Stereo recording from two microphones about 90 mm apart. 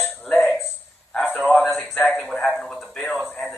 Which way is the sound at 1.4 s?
Centre (ahead or behind).